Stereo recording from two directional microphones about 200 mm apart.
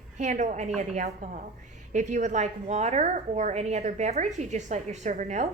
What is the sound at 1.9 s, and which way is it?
A woman's voice, 35° right (ahead or behind).